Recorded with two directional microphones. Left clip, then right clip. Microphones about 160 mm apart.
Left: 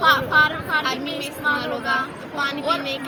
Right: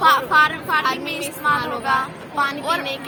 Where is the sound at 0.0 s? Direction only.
80° right.